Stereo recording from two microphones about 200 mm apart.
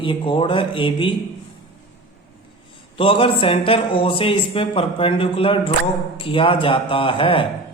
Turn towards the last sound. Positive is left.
turn(degrees=25)  # may be behind; listen again after turning